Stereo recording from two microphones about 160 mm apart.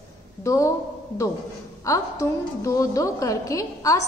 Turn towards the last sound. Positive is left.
turn(degrees=20)  # may be behind; listen again after turning